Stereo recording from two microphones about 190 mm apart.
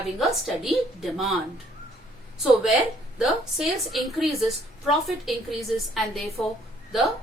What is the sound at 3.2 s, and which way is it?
A woman's voice, centre (ahead or behind).